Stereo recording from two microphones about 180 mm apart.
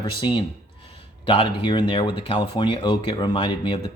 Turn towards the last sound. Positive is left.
turn(degrees=25)  # may be behind; listen again after turning